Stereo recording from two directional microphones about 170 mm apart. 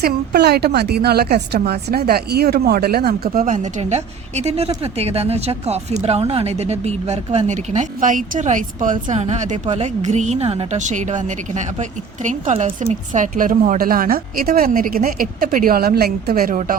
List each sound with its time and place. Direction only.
0.0 s a woman's voice: 70° right (ahead or behind)
3.2 s a woman's voice: 50° right (ahead or behind)